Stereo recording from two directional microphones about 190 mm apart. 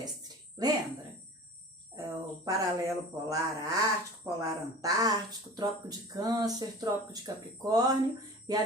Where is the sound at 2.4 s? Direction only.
15° right (ahead or behind).